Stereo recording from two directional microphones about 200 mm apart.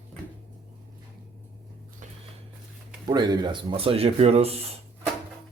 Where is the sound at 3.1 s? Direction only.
20° right (ahead or behind).